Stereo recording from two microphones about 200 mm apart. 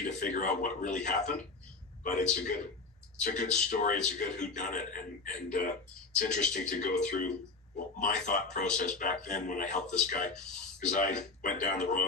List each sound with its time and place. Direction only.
0.0 s speech: 40° left (ahead or behind)